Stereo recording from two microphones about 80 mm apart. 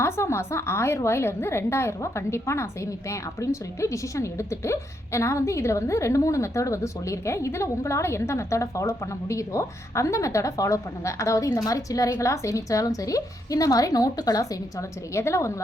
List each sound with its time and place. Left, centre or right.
0.0 s a woman's voice: left